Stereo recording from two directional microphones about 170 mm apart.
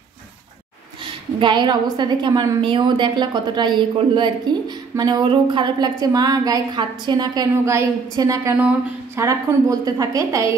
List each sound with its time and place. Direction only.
1.0 s a woman's voice: 25° right (ahead or behind)